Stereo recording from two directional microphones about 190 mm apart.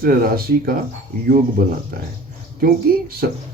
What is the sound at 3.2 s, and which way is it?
Speech, 55° right (ahead or behind).